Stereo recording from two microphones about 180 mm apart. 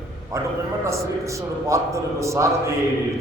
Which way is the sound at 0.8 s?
15° right (ahead or behind).